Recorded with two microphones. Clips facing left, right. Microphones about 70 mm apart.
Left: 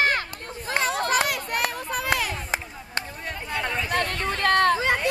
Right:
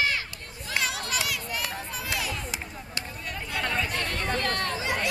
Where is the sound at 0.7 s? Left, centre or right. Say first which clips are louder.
Left 7 dB; left.